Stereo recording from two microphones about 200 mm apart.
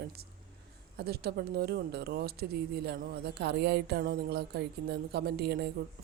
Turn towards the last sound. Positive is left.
turn(degrees=-55)  # may be behind; listen again after turning